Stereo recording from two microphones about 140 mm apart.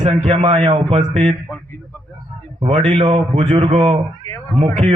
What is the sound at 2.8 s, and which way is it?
A man's voice, 40° right (ahead or behind).